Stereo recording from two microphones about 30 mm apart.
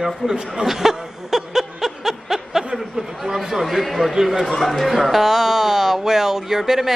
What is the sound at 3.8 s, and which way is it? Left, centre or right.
A man's voice, centre.